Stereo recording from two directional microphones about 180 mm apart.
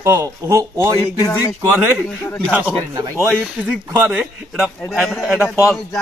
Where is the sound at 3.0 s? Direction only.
10° right (ahead or behind).